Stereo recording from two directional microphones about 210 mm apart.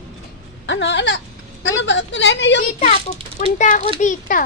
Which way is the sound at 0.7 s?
60° left (ahead or behind).